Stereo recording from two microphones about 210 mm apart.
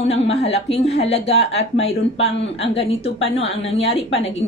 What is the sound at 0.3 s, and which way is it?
A woman's voice, 30° left (ahead or behind).